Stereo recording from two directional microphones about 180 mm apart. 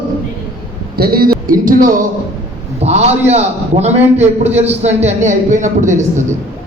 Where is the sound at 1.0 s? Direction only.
55° right (ahead or behind).